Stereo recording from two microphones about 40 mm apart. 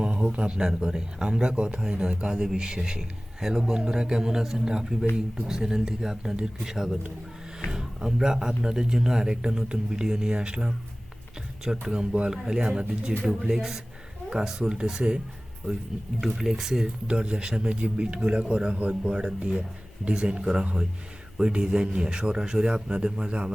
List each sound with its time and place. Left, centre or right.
0.0 s a sound: right
0.5 s a man's voice: centre
16.3 s speech: centre
16.8 s a man's voice: right